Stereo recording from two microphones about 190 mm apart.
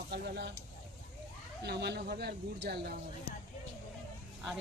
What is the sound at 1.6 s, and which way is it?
Speech, 60° right (ahead or behind).